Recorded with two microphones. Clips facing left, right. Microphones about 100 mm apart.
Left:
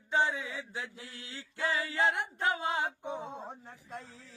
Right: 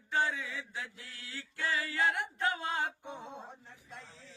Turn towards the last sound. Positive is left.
turn(degrees=45)  # may be behind; listen again after turning